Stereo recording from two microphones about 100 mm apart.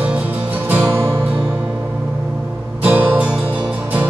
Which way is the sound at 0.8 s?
25° right (ahead or behind).